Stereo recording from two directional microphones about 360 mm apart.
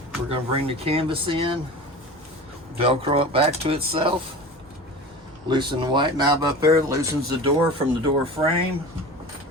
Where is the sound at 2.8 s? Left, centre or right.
Centre.